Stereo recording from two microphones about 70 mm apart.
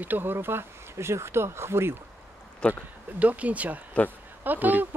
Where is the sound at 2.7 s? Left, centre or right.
Right.